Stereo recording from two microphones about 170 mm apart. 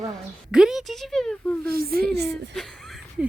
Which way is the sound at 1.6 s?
60° right (ahead or behind).